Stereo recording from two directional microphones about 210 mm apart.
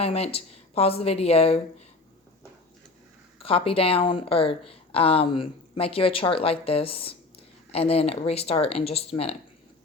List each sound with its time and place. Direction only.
0.0 s a woman's voice: 30° left (ahead or behind)
3.3 s speech: 25° left (ahead or behind)